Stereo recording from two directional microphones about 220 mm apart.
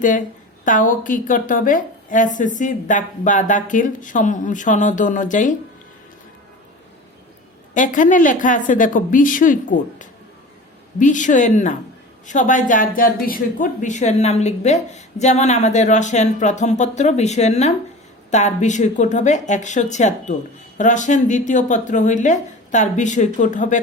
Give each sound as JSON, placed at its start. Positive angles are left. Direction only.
{"t": 0.0, "sound": "a woman's voice", "side_deg": 35}
{"t": 7.7, "sound": "a woman's voice", "side_deg": 35}
{"t": 11.0, "sound": "a woman's voice", "side_deg": 35}